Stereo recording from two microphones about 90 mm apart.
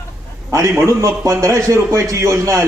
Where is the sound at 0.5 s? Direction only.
35° right (ahead or behind).